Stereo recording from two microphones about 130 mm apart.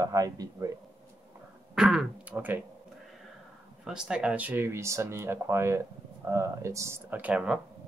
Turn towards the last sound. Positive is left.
turn(degrees=-10)  # may be behind; listen again after turning